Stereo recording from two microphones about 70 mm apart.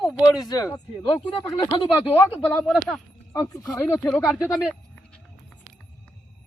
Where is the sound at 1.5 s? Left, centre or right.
Left.